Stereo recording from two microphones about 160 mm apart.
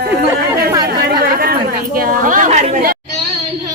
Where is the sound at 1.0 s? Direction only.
75° right (ahead or behind).